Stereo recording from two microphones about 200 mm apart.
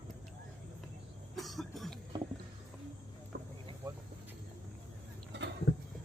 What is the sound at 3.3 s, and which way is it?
Vehicle, 55° right (ahead or behind).